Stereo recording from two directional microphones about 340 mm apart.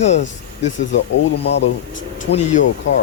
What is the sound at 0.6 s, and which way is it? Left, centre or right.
Speech, left.